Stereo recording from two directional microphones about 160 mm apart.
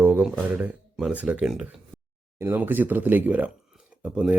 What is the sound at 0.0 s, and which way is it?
Speech, 10° right (ahead or behind).